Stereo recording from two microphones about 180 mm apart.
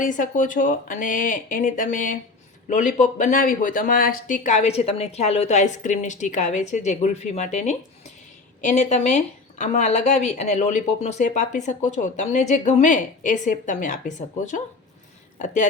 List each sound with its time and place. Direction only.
0.0 s speech: 45° left (ahead or behind)